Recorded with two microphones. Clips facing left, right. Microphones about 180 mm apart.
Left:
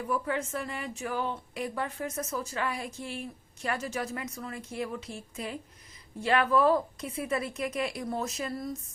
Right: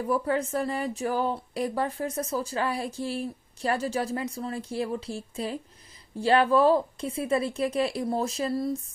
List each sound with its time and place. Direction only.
0.0 s a woman's voice: 35° right (ahead or behind)